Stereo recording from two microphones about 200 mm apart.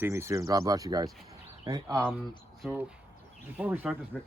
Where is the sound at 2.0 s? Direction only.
5° left (ahead or behind).